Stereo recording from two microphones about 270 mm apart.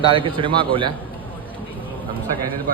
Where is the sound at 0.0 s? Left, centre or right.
Centre.